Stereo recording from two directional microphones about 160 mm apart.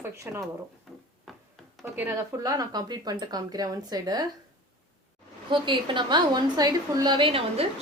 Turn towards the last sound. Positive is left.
turn(degrees=-35)  # may be behind; listen again after turning